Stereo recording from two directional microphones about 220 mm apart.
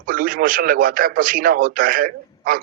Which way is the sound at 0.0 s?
40° right (ahead or behind).